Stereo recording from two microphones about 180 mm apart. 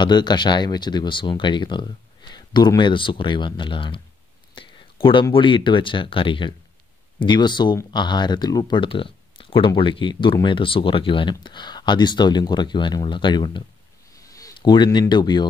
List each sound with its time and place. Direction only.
0.0 s speech: 25° left (ahead or behind)